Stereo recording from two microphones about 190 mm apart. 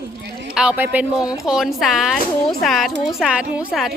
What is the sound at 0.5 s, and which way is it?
A woman's voice, 5° right (ahead or behind).